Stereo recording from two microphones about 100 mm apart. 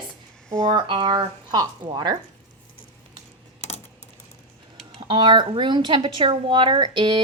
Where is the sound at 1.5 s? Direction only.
45° right (ahead or behind).